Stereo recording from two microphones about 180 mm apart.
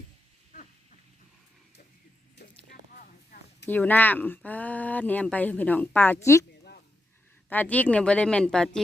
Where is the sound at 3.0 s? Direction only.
55° left (ahead or behind).